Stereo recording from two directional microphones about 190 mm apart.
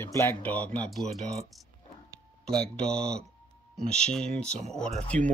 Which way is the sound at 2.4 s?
5° left (ahead or behind).